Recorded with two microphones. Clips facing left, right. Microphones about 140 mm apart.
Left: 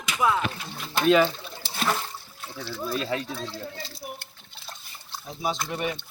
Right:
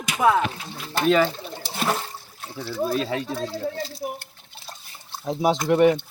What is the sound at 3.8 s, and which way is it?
Speech, 45° right (ahead or behind).